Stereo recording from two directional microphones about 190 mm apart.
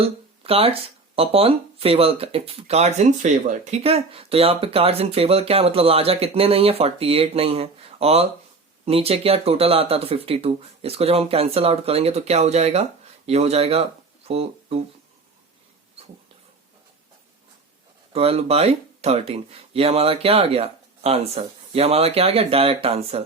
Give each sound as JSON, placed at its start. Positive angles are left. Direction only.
{"t": 0.0, "sound": "speech", "side_deg": -30}
{"t": 18.1, "sound": "speech", "side_deg": -30}